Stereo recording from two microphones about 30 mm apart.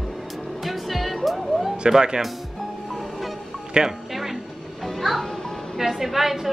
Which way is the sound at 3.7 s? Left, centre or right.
Right.